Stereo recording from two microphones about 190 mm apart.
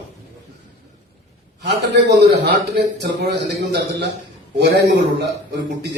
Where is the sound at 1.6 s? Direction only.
60° right (ahead or behind).